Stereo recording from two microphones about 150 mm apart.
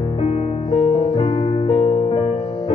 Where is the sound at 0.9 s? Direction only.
35° left (ahead or behind).